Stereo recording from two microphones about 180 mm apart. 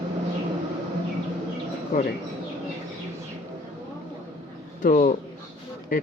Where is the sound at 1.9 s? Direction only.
55° left (ahead or behind).